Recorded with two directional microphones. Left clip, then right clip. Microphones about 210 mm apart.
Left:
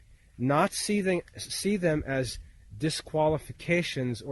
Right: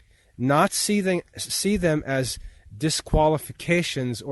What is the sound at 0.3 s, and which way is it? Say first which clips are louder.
Speech: right 5 dB; 45° right (ahead or behind).